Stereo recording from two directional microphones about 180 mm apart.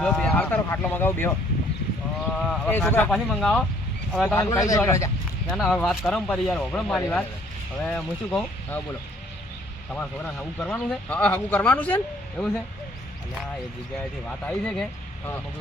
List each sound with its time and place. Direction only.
0.0 s speech: 5° left (ahead or behind)
2.4 s speech: 5° left (ahead or behind)
4.4 s speech: 15° left (ahead or behind)
5.5 s speech: centre (ahead or behind)
14.3 s speech: 5° left (ahead or behind)